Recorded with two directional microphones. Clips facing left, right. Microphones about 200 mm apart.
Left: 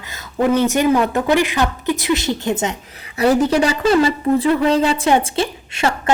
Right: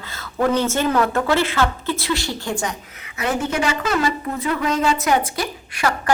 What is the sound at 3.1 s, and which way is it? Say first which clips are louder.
A woman's voice: left 8 dB; 35° left (ahead or behind).